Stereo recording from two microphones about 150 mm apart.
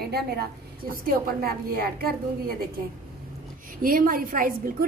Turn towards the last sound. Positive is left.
turn(degrees=-70)  # may be behind; listen again after turning